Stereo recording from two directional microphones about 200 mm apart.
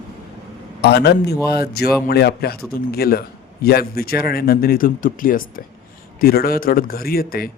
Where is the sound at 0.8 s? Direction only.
55° left (ahead or behind).